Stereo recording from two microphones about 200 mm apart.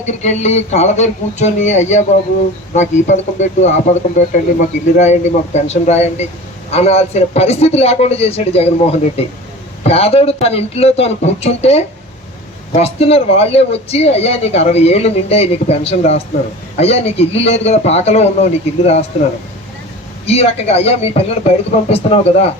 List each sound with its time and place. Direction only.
0.0 s speech: 35° left (ahead or behind)
20.2 s speech: 30° left (ahead or behind)